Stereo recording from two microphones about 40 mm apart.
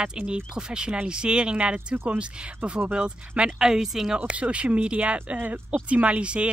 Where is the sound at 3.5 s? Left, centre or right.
Centre.